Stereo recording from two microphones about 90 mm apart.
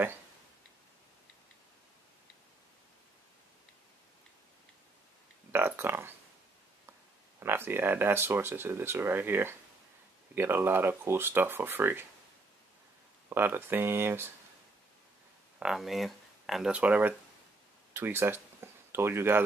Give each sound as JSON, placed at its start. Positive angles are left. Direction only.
{"t": 5.5, "sound": "a sound", "side_deg": -25}
{"t": 7.3, "sound": "speech", "side_deg": -25}
{"t": 13.3, "sound": "speech", "side_deg": -25}
{"t": 15.6, "sound": "speech", "side_deg": -5}
{"t": 16.7, "sound": "speech", "side_deg": -15}
{"t": 17.9, "sound": "speech", "side_deg": -25}